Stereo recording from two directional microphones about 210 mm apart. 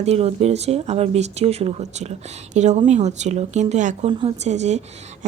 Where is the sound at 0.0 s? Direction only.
30° right (ahead or behind).